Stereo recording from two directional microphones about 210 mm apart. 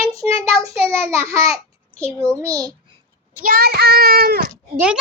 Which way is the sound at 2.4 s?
15° right (ahead or behind).